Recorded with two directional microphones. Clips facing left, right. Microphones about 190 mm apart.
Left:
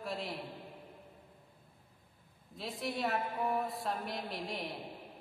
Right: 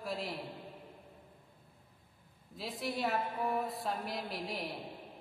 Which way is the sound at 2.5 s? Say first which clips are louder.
Even; centre (ahead or behind).